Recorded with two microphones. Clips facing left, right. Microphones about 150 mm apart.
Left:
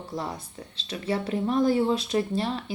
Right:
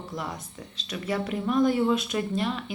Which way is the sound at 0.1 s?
30° left (ahead or behind).